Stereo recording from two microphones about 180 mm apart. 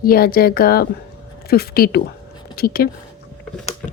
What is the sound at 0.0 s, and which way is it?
Speech, 55° left (ahead or behind).